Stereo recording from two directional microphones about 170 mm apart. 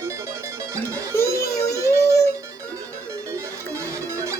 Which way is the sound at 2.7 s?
15° right (ahead or behind).